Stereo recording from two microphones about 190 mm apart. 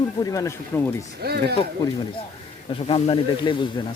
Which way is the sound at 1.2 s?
60° right (ahead or behind).